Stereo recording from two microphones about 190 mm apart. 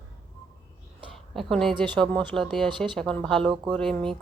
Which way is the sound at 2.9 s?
5° left (ahead or behind).